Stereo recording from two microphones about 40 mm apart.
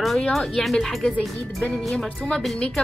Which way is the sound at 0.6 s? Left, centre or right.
Centre.